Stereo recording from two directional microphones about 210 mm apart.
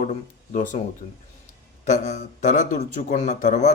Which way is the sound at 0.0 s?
35° left (ahead or behind).